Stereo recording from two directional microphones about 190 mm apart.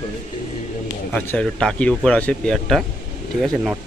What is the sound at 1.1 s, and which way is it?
Speech, 5° left (ahead or behind).